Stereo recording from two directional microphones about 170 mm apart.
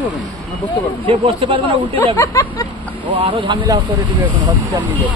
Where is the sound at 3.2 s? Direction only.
30° right (ahead or behind).